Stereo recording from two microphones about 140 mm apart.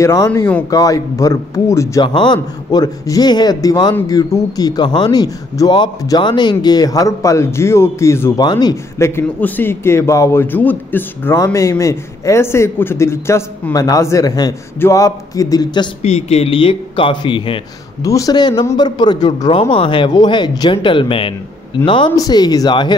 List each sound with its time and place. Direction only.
0.0 s a man's voice: 20° left (ahead or behind)
2.0 s a man's voice: 35° left (ahead or behind)
8.4 s a man's voice: 30° left (ahead or behind)
16.0 s a man's voice: 50° left (ahead or behind)
18.0 s a man's voice: 25° left (ahead or behind)